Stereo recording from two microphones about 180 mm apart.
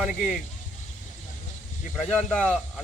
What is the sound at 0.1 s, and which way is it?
Speech, 45° left (ahead or behind).